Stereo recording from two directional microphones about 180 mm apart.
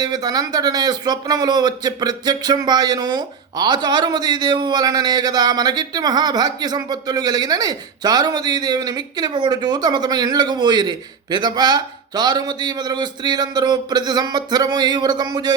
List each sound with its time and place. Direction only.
0.0 s a man's voice: 20° right (ahead or behind)